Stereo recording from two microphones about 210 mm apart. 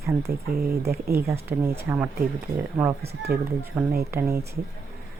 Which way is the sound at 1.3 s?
10° right (ahead or behind).